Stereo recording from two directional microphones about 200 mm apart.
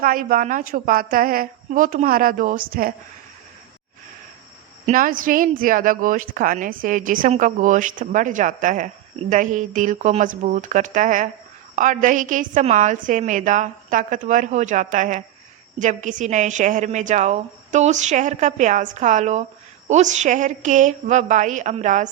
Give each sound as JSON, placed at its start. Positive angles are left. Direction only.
{"t": 0.0, "sound": "a woman's voice", "side_deg": -45}
{"t": 4.9, "sound": "a woman's voice", "side_deg": -45}